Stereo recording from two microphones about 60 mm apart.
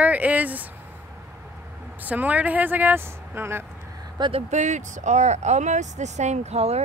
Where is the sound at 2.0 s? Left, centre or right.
Right.